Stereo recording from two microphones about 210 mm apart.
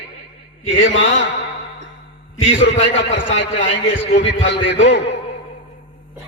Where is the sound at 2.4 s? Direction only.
60° left (ahead or behind).